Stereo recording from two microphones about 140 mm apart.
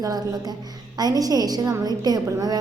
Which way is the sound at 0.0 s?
30° right (ahead or behind).